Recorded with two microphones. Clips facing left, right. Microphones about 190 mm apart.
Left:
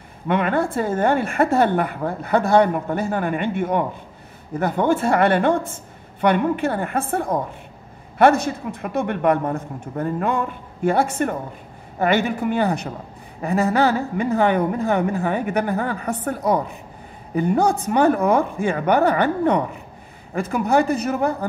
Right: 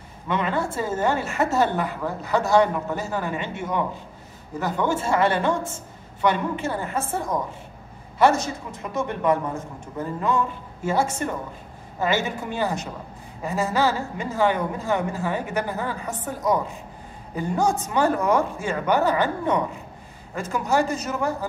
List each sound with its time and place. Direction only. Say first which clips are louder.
0.3 s a woman's voice: left 5 dB; 55° left (ahead or behind)